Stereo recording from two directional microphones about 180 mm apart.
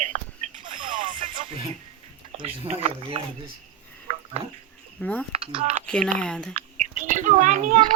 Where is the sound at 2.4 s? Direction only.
35° right (ahead or behind).